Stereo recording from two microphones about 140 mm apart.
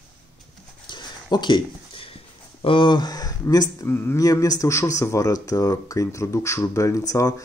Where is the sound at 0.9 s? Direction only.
30° left (ahead or behind).